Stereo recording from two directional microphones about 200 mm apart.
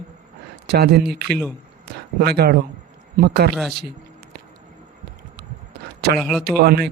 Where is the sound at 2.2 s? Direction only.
50° right (ahead or behind).